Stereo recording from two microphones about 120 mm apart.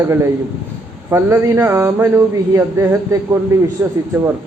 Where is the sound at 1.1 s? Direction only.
20° right (ahead or behind).